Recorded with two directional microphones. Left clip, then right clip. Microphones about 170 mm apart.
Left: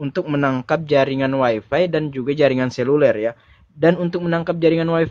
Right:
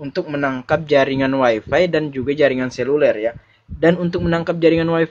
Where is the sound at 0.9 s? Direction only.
15° left (ahead or behind).